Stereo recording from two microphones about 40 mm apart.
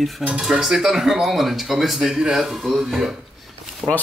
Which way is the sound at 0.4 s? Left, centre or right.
Centre.